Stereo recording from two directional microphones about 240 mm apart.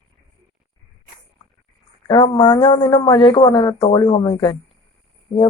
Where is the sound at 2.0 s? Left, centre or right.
Centre.